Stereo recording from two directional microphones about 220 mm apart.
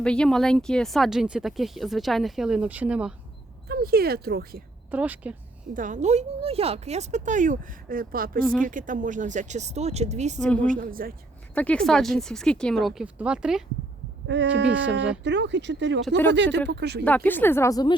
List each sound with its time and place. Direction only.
0.0 s speech: 5° left (ahead or behind)
3.7 s speech: 45° right (ahead or behind)
4.9 s speech: 5° right (ahead or behind)
5.7 s speech: 35° right (ahead or behind)
11.5 s speech: 5° left (ahead or behind)
14.3 s speech: 55° right (ahead or behind)
14.7 s speech: 5° right (ahead or behind)
15.2 s speech: 55° right (ahead or behind)
16.0 s speech: 5° left (ahead or behind)
16.3 s speech: 55° right (ahead or behind)
17.0 s speech: 5° left (ahead or behind)